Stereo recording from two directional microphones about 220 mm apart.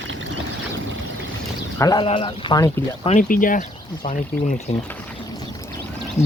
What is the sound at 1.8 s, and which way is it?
Speech, 20° left (ahead or behind).